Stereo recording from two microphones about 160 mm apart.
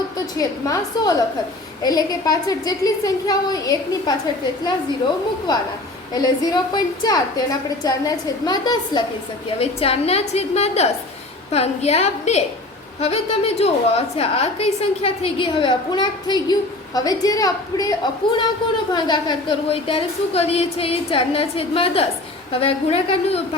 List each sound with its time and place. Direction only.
0.3 s a woman's voice: 20° left (ahead or behind)
6.1 s a woman's voice: 25° left (ahead or behind)
9.6 s a woman's voice: 40° left (ahead or behind)